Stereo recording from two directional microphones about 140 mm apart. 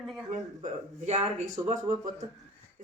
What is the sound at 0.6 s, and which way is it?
Speech, 50° right (ahead or behind).